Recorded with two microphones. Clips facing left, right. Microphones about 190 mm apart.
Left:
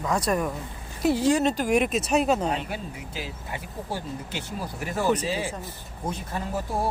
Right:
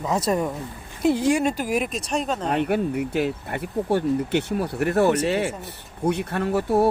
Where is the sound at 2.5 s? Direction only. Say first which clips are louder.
Right 8 dB; 60° right (ahead or behind).